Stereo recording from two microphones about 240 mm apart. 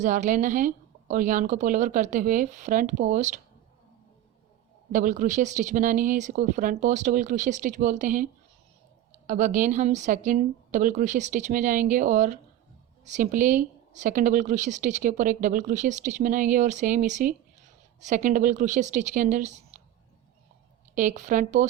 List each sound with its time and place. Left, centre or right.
0.0 s a woman's voice: right
4.9 s a woman's voice: right
20.9 s a woman's voice: right